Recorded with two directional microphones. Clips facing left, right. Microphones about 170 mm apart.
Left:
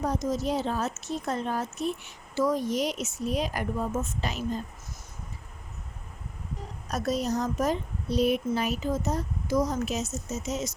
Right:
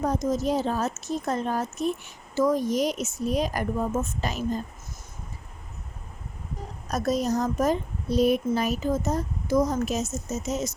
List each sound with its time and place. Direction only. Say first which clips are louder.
0.0 s a woman's voice: right 3 dB; 50° right (ahead or behind)
6.9 s a woman's voice: right 3 dB; 45° right (ahead or behind)